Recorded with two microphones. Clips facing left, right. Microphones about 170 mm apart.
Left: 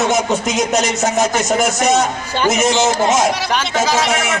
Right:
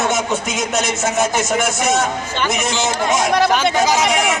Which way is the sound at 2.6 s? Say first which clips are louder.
Left 5 dB; 40° left (ahead or behind).